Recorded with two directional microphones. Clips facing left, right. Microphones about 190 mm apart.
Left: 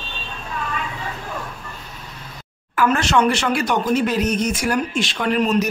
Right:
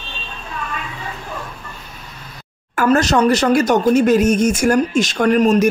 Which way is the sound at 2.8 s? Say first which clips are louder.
Right 3 dB; 40° right (ahead or behind).